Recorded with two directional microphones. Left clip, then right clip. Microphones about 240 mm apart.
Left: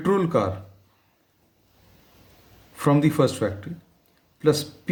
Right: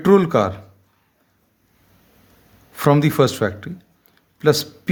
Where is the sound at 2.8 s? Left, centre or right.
Right.